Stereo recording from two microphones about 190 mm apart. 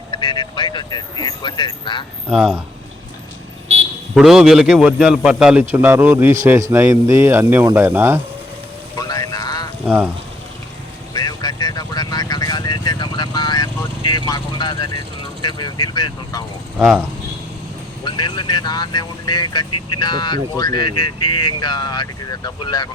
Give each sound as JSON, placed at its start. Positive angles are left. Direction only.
{"t": 0.1, "sound": "speech", "side_deg": 25}
{"t": 2.3, "sound": "a man's voice", "side_deg": -5}
{"t": 4.1, "sound": "a man's voice", "side_deg": 0}
{"t": 9.0, "sound": "a sound", "side_deg": 20}
{"t": 9.8, "sound": "speech", "side_deg": -5}
{"t": 11.1, "sound": "vehicle", "side_deg": 20}
{"t": 16.7, "sound": "a man's voice", "side_deg": -5}
{"t": 18.0, "sound": "speech", "side_deg": 25}